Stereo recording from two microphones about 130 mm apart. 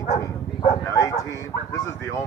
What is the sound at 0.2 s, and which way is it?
Speech, 25° left (ahead or behind).